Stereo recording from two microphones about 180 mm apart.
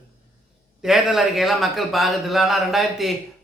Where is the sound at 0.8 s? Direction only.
Centre (ahead or behind).